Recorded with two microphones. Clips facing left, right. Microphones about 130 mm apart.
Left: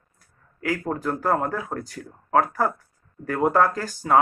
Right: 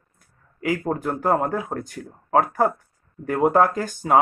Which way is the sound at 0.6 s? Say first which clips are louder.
Right 3 dB; 20° right (ahead or behind).